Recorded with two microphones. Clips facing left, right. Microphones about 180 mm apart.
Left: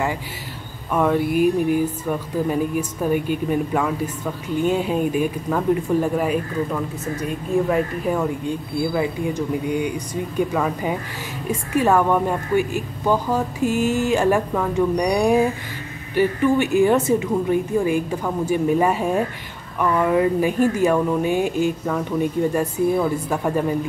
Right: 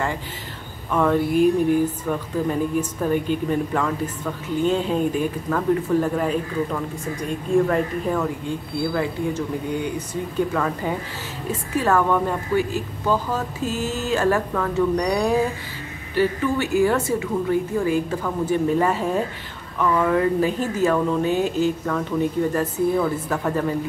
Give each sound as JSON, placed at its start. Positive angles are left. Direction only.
{"t": 0.9, "sound": "speech", "side_deg": 10}